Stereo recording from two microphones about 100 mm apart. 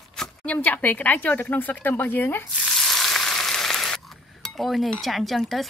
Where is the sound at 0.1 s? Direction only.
10° left (ahead or behind).